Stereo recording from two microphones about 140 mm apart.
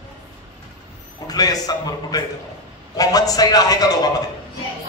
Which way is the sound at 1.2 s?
25° left (ahead or behind).